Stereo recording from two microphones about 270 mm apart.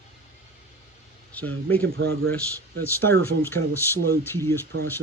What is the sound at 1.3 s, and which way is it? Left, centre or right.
Speech, centre.